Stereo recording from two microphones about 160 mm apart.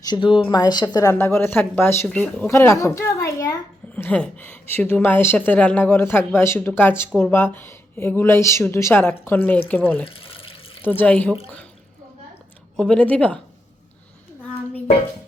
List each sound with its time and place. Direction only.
0.0 s speech: 30° left (ahead or behind)
1.2 s a woman's voice: 15° left (ahead or behind)
10.1 s water tap: 35° left (ahead or behind)
10.8 s a woman's voice: 10° left (ahead or behind)
12.7 s a woman's voice: 5° left (ahead or behind)